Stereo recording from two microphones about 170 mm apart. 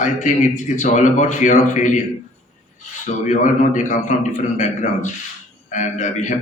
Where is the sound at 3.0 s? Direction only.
45° left (ahead or behind).